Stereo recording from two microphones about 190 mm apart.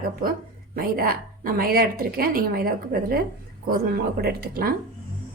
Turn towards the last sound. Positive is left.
turn(degrees=-50)  # may be behind; listen again after turning